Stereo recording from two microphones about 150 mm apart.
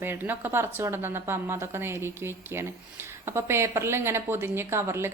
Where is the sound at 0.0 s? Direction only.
15° right (ahead or behind).